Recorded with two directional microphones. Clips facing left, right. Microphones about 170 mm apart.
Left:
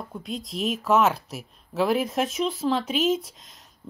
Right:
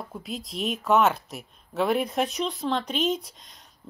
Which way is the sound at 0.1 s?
Centre (ahead or behind).